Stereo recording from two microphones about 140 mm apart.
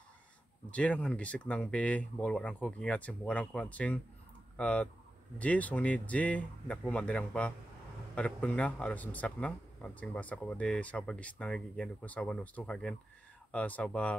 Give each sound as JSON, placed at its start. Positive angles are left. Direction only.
{"t": 0.7, "sound": "a man's voice", "side_deg": 10}